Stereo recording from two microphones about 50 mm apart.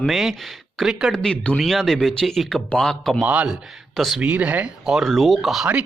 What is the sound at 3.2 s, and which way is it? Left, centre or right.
Speech, right.